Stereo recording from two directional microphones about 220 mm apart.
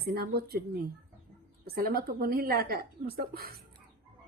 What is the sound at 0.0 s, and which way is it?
Speech, 45° right (ahead or behind).